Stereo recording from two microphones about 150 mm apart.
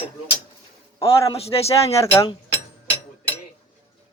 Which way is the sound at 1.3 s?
40° left (ahead or behind).